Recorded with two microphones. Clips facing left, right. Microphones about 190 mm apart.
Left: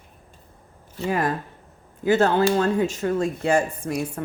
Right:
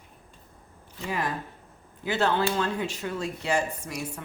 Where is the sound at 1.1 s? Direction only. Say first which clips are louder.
Left 6 dB; 50° left (ahead or behind).